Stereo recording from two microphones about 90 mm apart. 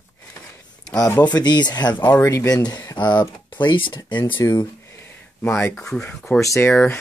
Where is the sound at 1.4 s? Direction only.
50° left (ahead or behind).